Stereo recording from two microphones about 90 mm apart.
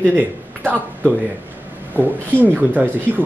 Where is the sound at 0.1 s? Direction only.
20° right (ahead or behind).